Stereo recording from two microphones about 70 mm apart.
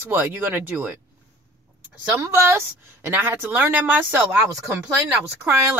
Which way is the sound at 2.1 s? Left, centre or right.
Right.